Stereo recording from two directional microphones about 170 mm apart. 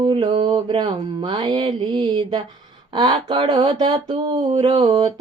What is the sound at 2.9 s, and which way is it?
Speech, 35° right (ahead or behind).